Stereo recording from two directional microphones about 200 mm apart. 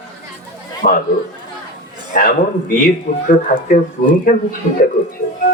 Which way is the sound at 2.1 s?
45° left (ahead or behind).